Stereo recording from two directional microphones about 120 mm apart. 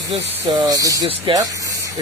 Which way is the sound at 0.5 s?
30° right (ahead or behind).